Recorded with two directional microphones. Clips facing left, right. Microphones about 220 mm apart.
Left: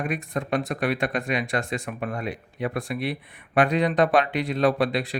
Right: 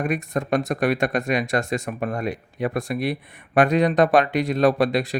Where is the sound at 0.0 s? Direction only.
45° right (ahead or behind).